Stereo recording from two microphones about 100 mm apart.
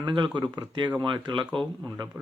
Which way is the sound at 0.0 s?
50° right (ahead or behind).